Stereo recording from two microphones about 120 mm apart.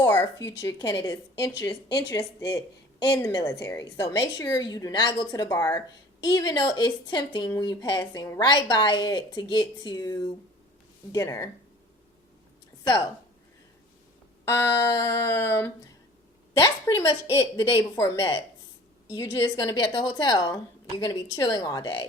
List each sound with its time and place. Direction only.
0.2 s a woman's voice: 30° left (ahead or behind)
14.4 s a woman's voice: 20° left (ahead or behind)
19.8 s a woman's voice: 40° left (ahead or behind)